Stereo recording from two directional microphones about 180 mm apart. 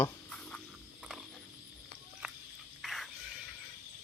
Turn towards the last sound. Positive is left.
turn(degrees=0)  # may be behind; listen again after turning